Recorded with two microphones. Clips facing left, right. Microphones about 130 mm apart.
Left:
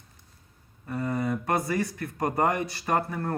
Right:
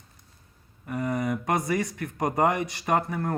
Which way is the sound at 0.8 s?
15° right (ahead or behind).